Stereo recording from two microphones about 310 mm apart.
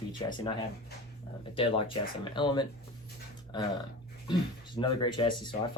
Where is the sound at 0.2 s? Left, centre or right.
Centre.